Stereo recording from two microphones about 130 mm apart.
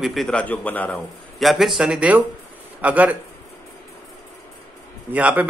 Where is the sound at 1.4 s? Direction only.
Centre (ahead or behind).